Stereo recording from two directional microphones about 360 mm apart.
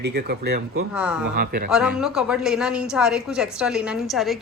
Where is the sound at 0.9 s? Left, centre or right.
Centre.